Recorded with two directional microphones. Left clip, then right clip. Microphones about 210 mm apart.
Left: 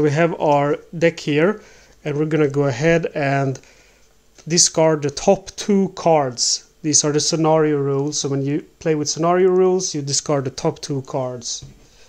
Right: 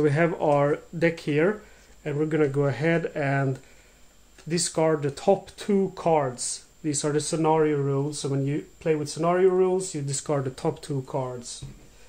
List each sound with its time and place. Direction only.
0.0 s speech: 35° left (ahead or behind)